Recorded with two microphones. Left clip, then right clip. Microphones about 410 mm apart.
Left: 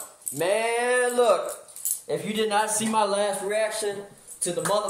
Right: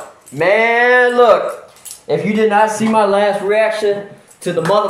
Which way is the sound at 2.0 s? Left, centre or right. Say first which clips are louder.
Right 12 dB; left.